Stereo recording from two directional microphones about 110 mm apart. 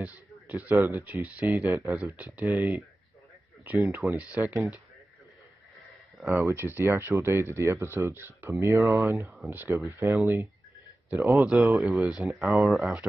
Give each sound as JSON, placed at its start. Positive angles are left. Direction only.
{"t": 0.7, "sound": "speech", "side_deg": -25}
{"t": 1.2, "sound": "speech", "side_deg": -15}
{"t": 1.7, "sound": "speech", "side_deg": -25}
{"t": 2.1, "sound": "speech", "side_deg": -15}
{"t": 6.2, "sound": "speech", "side_deg": -25}
{"t": 11.3, "sound": "speech", "side_deg": -5}